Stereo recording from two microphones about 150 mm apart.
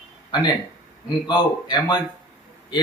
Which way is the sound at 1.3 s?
30° left (ahead or behind).